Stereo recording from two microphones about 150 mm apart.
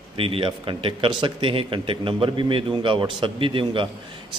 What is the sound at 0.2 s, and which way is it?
Speech, 35° right (ahead or behind).